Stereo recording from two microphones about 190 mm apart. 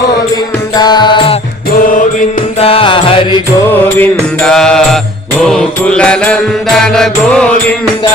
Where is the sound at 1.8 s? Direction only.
45° left (ahead or behind).